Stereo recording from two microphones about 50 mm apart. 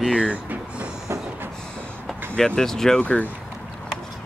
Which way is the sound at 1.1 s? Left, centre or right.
Right.